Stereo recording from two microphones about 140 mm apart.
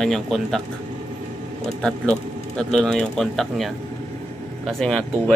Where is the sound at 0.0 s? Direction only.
5° left (ahead or behind).